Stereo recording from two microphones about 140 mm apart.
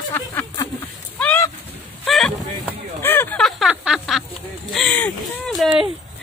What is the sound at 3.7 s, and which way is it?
Speech, 5° right (ahead or behind).